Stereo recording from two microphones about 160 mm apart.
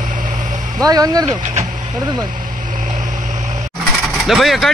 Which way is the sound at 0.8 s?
25° right (ahead or behind).